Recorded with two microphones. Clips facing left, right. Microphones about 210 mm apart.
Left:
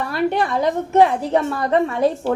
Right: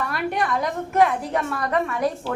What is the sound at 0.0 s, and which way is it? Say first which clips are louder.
A woman's voice: left 5 dB; 30° left (ahead or behind).